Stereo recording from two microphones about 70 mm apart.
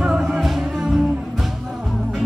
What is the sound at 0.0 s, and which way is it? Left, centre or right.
Music, centre.